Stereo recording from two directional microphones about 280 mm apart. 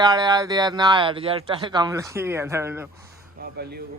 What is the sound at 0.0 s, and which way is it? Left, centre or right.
Speech, centre.